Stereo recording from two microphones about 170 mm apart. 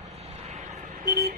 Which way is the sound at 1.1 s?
60° right (ahead or behind).